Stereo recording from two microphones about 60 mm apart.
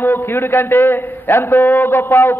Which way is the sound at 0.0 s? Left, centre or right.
Left.